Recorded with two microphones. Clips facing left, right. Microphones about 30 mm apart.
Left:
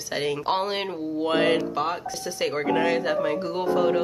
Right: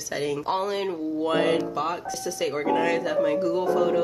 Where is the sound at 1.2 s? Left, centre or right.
Left.